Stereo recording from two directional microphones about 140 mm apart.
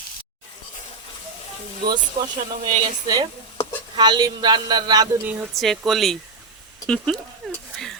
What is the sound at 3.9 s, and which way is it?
Speech, 30° right (ahead or behind).